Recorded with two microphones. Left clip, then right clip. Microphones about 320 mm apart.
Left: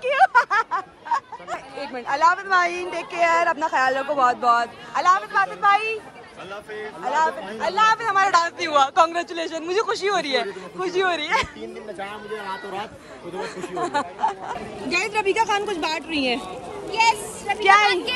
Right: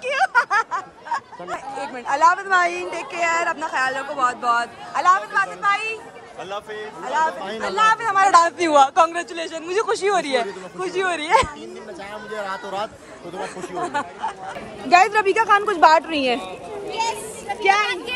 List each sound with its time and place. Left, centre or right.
0.0 s a sound: centre
1.5 s speech: centre
7.1 s speech: centre
14.9 s a woman's voice: centre
15.1 s speech: centre
17.8 s speech: centre